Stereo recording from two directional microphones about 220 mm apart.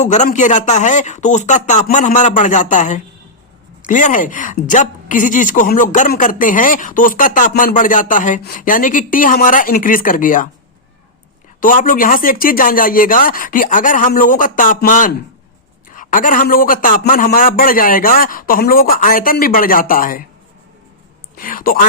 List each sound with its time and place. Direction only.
0.0 s a woman's voice: 35° left (ahead or behind)
11.6 s a woman's voice: 35° left (ahead or behind)
21.3 s a woman's voice: 40° left (ahead or behind)